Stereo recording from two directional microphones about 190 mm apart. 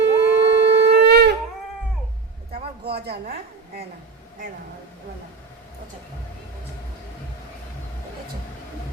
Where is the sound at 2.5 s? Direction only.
55° right (ahead or behind).